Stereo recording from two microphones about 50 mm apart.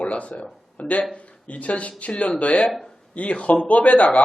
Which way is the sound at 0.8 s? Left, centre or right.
Left.